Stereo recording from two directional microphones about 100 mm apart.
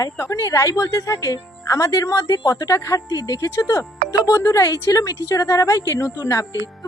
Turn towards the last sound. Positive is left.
turn(degrees=35)  # may be behind; listen again after turning